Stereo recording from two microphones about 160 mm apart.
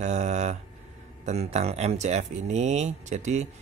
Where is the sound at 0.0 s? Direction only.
45° right (ahead or behind).